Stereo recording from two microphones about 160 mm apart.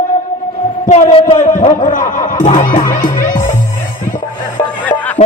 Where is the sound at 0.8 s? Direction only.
60° left (ahead or behind).